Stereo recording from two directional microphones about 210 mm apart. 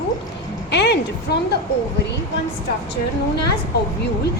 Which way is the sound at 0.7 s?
55° left (ahead or behind).